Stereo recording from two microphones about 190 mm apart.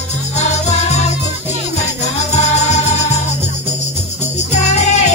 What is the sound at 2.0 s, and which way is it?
Music, 35° left (ahead or behind).